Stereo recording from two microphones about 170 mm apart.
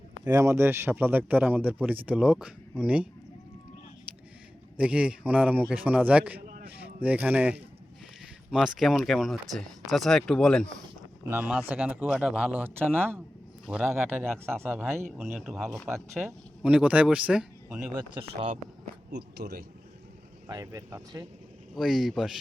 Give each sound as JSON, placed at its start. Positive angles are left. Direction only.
{"t": 0.3, "sound": "a man's voice", "side_deg": -20}
{"t": 4.8, "sound": "a man's voice", "side_deg": -5}
{"t": 11.3, "sound": "a man's voice", "side_deg": -10}
{"t": 12.0, "sound": "speech", "side_deg": 5}
{"t": 12.3, "sound": "a man's voice", "side_deg": -10}
{"t": 14.4, "sound": "a man's voice", "side_deg": -15}
{"t": 14.8, "sound": "speech", "side_deg": 0}
{"t": 17.7, "sound": "speech", "side_deg": -20}
{"t": 19.1, "sound": "speech", "side_deg": -70}
{"t": 20.5, "sound": "speech", "side_deg": -20}
{"t": 21.8, "sound": "speech", "side_deg": 0}